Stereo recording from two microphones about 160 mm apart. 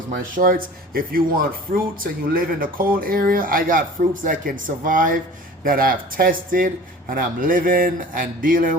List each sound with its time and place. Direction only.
0.3 s speech: 65° right (ahead or behind)